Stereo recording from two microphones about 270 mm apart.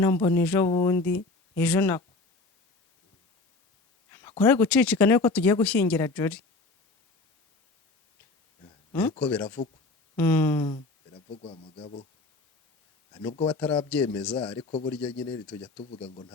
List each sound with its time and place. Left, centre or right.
0.0 s speech: centre
4.1 s speech: centre
8.6 s a sound: centre
9.2 s speech: centre; by 12.0 s left
13.1 s speech: centre
13.5 s speech: centre
14.6 s speech: left
14.8 s speech: centre
15.8 s speech: left